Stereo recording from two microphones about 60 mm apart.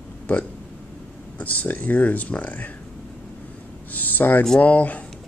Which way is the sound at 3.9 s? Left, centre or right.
Left.